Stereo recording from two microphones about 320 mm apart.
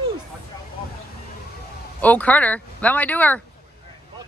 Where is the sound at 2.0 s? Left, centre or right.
Centre.